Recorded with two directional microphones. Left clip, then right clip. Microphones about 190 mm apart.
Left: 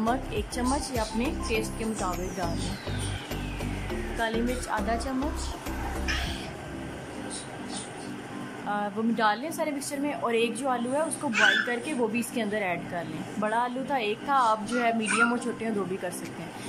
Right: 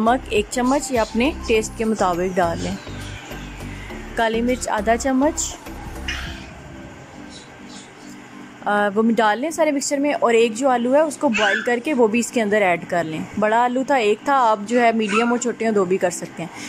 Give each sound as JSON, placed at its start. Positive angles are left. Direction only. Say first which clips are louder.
{"t": 0.0, "sound": "a woman's voice", "louder": "right 11 dB", "side_deg": -20}
{"t": 4.2, "sound": "a woman's voice", "louder": "right 10 dB", "side_deg": -25}
{"t": 8.6, "sound": "a woman's voice", "louder": "right 12 dB", "side_deg": -30}